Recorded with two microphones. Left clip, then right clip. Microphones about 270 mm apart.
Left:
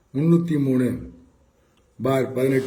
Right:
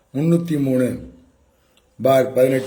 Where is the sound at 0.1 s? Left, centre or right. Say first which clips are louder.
Right 1 dB; centre.